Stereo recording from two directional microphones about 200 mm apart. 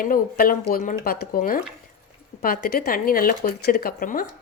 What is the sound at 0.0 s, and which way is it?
Speech, 45° left (ahead or behind).